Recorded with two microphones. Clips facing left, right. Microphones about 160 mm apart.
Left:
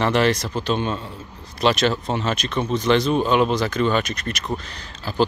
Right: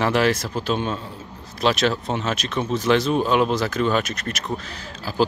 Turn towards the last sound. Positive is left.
turn(degrees=-5)  # may be behind; listen again after turning